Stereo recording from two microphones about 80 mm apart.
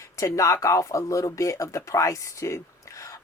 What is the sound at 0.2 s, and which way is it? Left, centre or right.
Speech, left.